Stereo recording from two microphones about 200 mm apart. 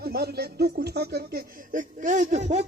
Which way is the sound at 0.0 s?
50° right (ahead or behind).